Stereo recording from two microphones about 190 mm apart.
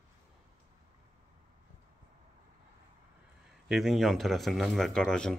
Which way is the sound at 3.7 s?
Centre (ahead or behind).